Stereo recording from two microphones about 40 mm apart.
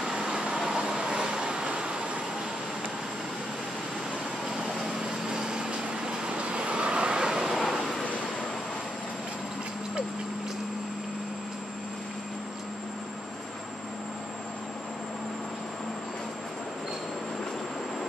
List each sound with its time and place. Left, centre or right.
0.2 s vehicle: right
4.7 s vehicle: centre
7.3 s vehicle: centre